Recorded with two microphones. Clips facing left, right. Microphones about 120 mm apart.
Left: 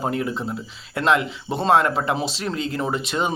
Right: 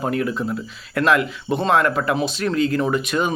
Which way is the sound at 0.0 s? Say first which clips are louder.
Right 2 dB; 25° left (ahead or behind).